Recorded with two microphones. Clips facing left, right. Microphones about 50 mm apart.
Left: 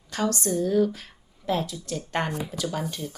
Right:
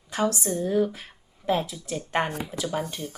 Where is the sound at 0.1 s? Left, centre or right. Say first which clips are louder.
Even; centre.